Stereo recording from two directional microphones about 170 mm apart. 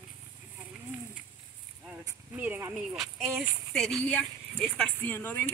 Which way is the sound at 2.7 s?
Centre (ahead or behind).